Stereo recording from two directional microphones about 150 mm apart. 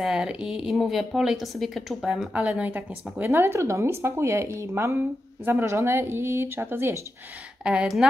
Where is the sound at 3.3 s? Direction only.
15° right (ahead or behind).